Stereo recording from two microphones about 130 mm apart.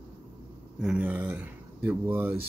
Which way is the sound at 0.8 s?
10° right (ahead or behind).